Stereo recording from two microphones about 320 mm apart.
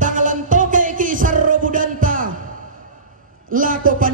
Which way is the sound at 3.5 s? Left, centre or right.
Right.